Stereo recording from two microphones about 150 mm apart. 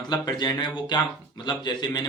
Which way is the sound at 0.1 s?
25° left (ahead or behind).